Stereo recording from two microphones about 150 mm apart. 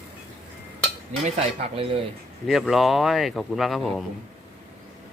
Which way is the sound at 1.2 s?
45° right (ahead or behind).